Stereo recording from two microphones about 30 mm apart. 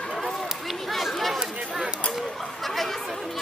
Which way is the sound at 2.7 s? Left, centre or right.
Centre.